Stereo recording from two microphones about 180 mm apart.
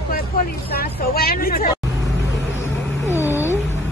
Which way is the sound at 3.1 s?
10° right (ahead or behind).